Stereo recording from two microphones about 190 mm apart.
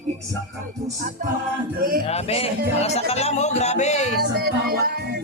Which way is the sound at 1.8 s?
50° right (ahead or behind).